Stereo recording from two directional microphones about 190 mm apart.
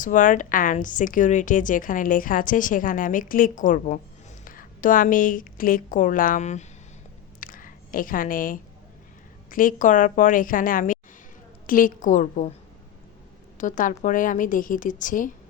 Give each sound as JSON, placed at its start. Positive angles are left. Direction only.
{"t": 0.0, "sound": "a woman's voice", "side_deg": 45}
{"t": 7.3, "sound": "camera", "side_deg": 45}
{"t": 9.5, "sound": "a woman's voice", "side_deg": 45}
{"t": 13.6, "sound": "a woman's voice", "side_deg": 45}